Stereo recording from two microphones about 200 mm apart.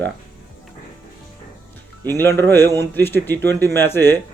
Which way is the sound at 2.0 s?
10° left (ahead or behind).